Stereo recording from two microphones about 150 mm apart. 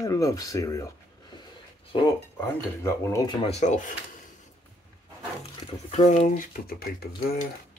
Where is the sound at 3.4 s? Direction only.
50° left (ahead or behind).